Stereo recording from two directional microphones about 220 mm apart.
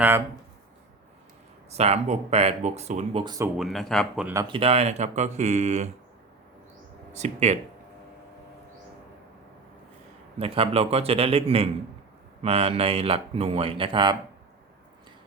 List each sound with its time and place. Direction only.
1.7 s speech: 30° right (ahead or behind)
3.6 s speech: centre (ahead or behind)
4.4 s speech: 25° right (ahead or behind)
7.1 s speech: 30° right (ahead or behind)
10.3 s speech: 25° right (ahead or behind)